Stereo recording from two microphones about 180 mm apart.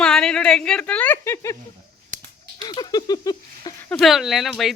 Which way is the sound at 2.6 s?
25° left (ahead or behind).